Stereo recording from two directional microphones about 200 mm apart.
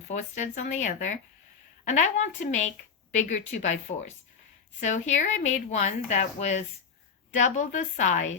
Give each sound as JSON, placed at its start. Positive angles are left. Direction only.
{"t": 0.1, "sound": "a woman's voice", "side_deg": 35}